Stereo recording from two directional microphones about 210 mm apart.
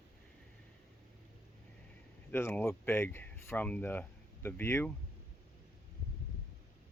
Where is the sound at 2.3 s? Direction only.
10° left (ahead or behind).